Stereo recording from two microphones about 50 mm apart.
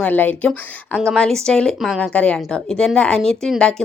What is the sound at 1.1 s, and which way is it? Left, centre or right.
Speech, centre.